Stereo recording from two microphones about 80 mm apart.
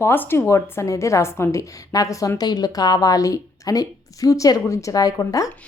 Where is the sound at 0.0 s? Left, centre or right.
Left.